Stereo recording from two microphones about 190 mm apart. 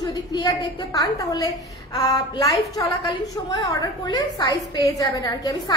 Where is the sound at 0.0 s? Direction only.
20° left (ahead or behind).